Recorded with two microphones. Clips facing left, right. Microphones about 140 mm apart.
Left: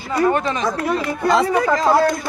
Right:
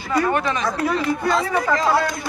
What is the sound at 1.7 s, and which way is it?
Speech, 40° left (ahead or behind).